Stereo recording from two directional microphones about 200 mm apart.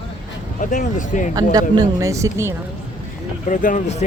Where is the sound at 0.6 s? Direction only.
45° left (ahead or behind).